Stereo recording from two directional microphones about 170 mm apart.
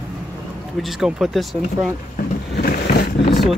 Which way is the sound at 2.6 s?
60° left (ahead or behind).